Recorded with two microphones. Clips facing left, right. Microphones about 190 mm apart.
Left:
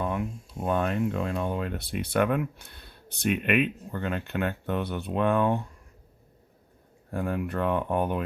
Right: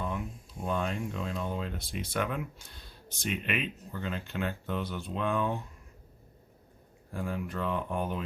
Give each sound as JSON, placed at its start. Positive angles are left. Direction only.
{"t": 0.0, "sound": "speech", "side_deg": 60}
{"t": 7.1, "sound": "speech", "side_deg": 60}